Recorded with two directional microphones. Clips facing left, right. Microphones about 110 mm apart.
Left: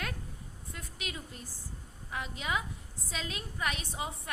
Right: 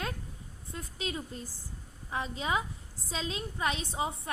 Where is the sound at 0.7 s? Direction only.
30° right (ahead or behind).